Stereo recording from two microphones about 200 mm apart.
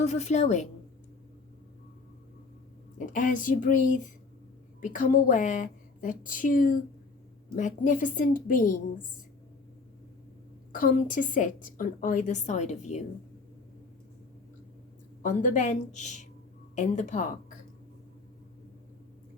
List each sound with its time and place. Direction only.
0.0 s a woman's voice: 35° left (ahead or behind)
3.1 s a woman's voice: 40° left (ahead or behind)
10.7 s a woman's voice: 40° left (ahead or behind)
15.2 s a woman's voice: 40° left (ahead or behind)